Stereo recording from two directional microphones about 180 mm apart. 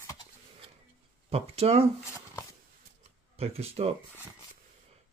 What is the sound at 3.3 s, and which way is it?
Speech, 35° right (ahead or behind).